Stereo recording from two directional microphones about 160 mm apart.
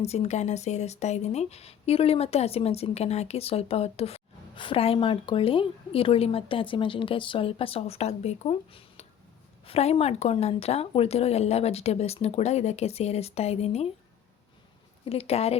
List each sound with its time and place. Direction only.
0.0 s speech: 40° left (ahead or behind)
15.0 s speech: 40° left (ahead or behind)